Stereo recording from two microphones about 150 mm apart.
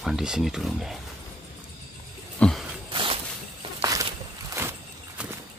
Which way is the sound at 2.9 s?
35° right (ahead or behind).